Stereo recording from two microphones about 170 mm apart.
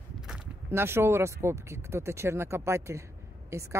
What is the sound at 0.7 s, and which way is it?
Speech, 15° right (ahead or behind).